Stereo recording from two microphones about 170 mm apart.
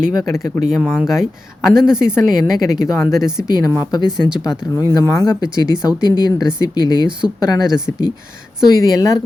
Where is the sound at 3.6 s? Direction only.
25° left (ahead or behind).